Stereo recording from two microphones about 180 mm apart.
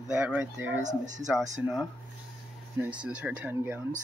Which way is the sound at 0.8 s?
40° right (ahead or behind).